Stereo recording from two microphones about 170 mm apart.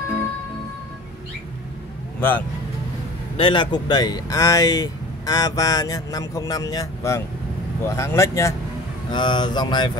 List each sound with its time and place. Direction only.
2.1 s speech: 10° left (ahead or behind)
3.3 s speech: 30° left (ahead or behind)